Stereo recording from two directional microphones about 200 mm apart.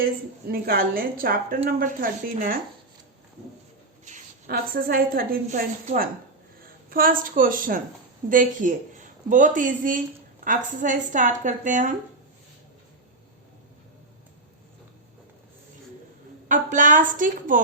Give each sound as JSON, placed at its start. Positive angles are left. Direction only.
{"t": 0.0, "sound": "a woman's voice", "side_deg": -50}
{"t": 4.0, "sound": "a woman's voice", "side_deg": -45}
{"t": 16.5, "sound": "speech", "side_deg": -40}